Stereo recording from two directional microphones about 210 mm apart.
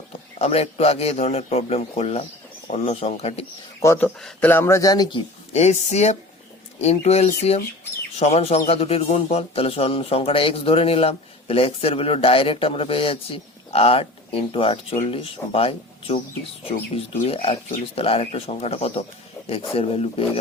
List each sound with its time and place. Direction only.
0.3 s speech: 30° left (ahead or behind)
3.8 s speech: 10° left (ahead or behind)
5.5 s speech: 30° left (ahead or behind)